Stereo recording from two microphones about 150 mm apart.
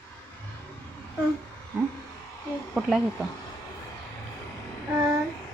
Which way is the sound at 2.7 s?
5° right (ahead or behind).